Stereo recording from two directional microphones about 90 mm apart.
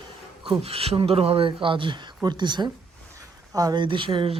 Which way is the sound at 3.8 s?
70° right (ahead or behind).